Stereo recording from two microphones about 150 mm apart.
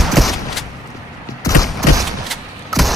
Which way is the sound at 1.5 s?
20° left (ahead or behind).